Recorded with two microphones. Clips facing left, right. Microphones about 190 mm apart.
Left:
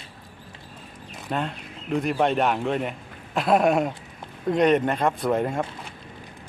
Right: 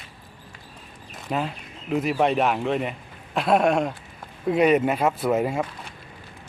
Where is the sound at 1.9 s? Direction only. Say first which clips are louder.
Right 1 dB; centre (ahead or behind).